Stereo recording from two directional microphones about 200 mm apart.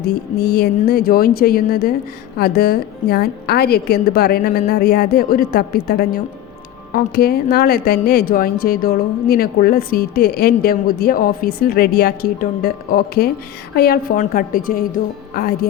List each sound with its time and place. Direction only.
0.0 s speech: 50° left (ahead or behind)